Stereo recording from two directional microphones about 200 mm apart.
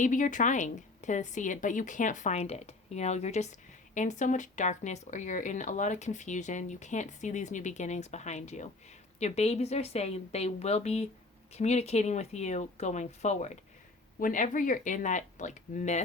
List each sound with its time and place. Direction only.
0.0 s speech: 40° left (ahead or behind)